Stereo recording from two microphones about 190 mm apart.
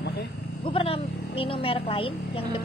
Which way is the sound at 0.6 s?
30° left (ahead or behind).